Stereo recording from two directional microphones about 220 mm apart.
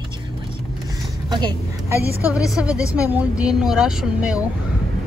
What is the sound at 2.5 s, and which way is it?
A woman's voice, 5° right (ahead or behind).